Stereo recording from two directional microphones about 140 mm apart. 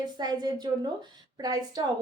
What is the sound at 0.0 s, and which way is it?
A woman's voice, 30° right (ahead or behind).